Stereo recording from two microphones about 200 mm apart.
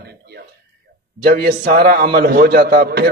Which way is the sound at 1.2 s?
50° right (ahead or behind).